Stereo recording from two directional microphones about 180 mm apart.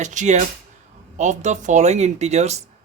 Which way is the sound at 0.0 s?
40° right (ahead or behind).